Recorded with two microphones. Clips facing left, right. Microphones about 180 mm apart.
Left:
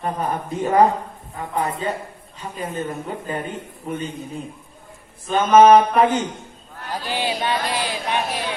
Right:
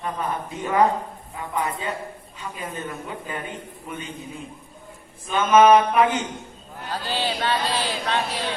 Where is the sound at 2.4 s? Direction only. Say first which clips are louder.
Left 5 dB; 40° left (ahead or behind).